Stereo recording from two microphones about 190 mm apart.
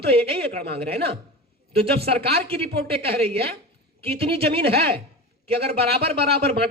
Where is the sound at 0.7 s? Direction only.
55° right (ahead or behind).